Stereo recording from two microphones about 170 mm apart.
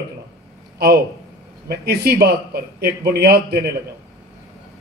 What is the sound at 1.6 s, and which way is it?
Speech, 70° right (ahead or behind).